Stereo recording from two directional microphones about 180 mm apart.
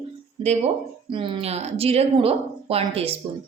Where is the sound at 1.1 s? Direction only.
30° right (ahead or behind).